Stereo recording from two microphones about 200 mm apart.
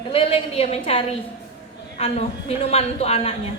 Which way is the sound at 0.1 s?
30° left (ahead or behind).